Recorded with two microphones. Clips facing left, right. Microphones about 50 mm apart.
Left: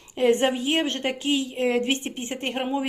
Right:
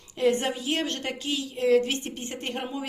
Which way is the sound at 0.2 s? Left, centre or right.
Left.